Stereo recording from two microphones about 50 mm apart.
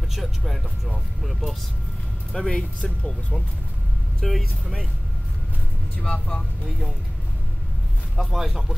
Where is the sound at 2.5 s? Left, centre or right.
Centre.